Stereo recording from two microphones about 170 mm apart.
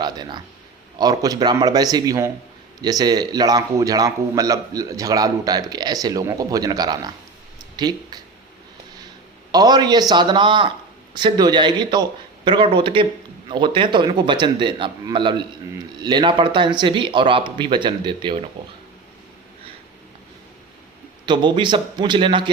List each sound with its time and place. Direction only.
0.0 s a man's voice: 25° right (ahead or behind)
9.5 s a man's voice: 25° right (ahead or behind)
21.2 s a man's voice: 30° right (ahead or behind)